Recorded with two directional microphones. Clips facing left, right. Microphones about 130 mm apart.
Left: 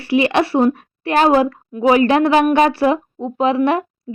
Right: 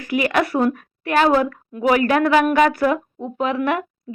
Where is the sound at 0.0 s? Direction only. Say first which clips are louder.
Left 4 dB; 30° left (ahead or behind).